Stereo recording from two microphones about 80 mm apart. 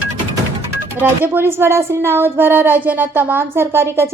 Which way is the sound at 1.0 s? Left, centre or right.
Right.